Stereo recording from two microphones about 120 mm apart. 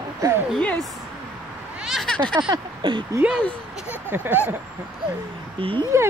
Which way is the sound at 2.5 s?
45° right (ahead or behind).